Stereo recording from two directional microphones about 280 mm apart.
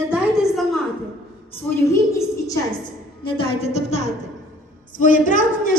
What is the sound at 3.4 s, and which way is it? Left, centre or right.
A woman's voice, left.